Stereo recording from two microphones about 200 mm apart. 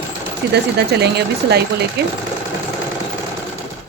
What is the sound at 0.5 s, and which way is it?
A woman's voice, 55° right (ahead or behind).